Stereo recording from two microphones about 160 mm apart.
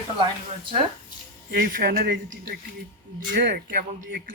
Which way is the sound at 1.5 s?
70° right (ahead or behind).